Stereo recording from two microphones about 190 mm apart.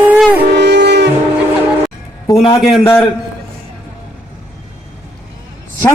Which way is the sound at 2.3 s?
25° left (ahead or behind).